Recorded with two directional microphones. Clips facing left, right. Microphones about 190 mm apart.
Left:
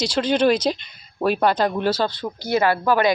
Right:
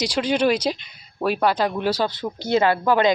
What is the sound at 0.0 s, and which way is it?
Speech, 15° right (ahead or behind).